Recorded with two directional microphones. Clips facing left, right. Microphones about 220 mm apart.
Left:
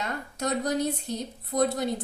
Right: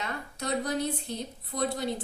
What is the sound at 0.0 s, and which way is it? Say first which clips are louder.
Speech: left 4 dB; 45° left (ahead or behind).